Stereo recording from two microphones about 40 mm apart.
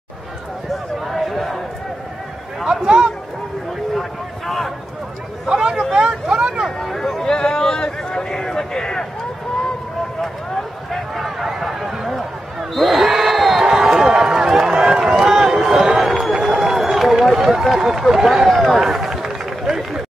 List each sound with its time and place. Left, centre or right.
1.0 s chatter: centre
2.6 s speech: centre
4.5 s speech: centre
5.5 s speech: centre
5.9 s vehicle: right
6.8 s a sound: centre
11.1 s a sound: centre
16.0 s a sound: centre
16.3 s run: centre
18.5 s speech: centre
18.8 s run: centre